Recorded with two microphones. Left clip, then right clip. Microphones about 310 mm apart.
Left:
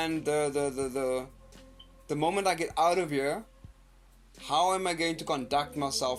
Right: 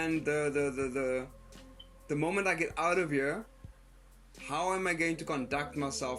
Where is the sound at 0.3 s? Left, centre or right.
Left.